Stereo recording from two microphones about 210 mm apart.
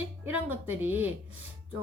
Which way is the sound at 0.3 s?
10° right (ahead or behind).